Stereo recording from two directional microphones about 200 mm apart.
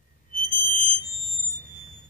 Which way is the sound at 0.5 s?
45° left (ahead or behind).